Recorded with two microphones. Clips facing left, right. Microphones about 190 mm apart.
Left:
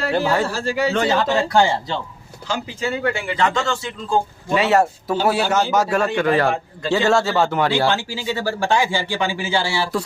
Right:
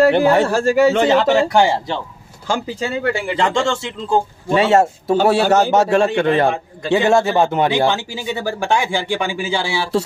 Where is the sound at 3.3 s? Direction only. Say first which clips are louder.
Right 3 dB; 25° right (ahead or behind).